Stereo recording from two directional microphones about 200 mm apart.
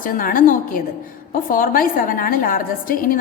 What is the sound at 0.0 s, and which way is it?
A woman's voice, 45° left (ahead or behind).